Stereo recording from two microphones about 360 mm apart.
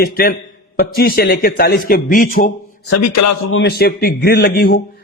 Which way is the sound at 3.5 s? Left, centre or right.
Left.